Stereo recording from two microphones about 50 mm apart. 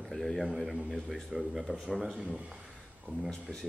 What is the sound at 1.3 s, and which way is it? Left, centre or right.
Speech, centre.